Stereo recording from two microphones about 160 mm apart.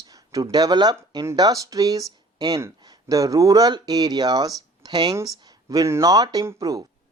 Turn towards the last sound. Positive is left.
turn(degrees=-20)  # may be behind; listen again after turning